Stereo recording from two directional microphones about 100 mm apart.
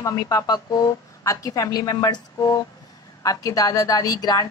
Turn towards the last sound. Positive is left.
turn(degrees=40)  # may be behind; listen again after turning